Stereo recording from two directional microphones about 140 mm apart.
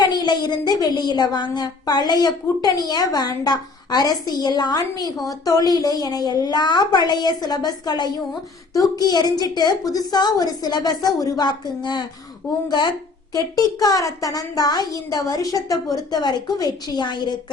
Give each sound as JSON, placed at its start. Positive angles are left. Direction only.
{"t": 0.0, "sound": "a woman's voice", "side_deg": 30}